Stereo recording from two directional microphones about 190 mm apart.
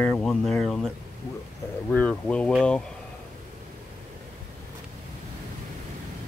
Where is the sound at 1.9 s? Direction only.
5° left (ahead or behind).